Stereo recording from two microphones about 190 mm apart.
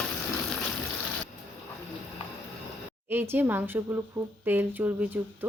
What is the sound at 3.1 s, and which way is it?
Speech, 10° right (ahead or behind).